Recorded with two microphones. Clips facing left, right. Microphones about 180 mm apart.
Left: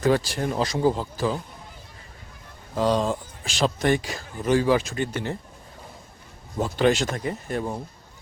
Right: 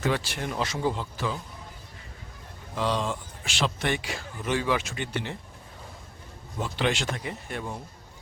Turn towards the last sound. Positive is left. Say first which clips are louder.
# left 6 dB
turn(degrees=35)  # may be behind; listen again after turning